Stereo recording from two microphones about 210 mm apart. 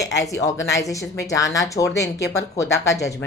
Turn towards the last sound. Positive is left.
turn(degrees=15)  # may be behind; listen again after turning